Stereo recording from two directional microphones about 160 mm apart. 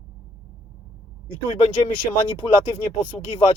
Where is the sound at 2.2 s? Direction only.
35° left (ahead or behind).